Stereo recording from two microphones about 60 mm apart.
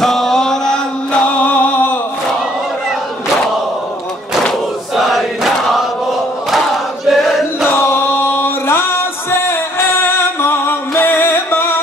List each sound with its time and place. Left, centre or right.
0.0 s chant: centre
1.2 s music: left
4.9 s chant: centre
7.1 s chant: centre
7.6 s chant: left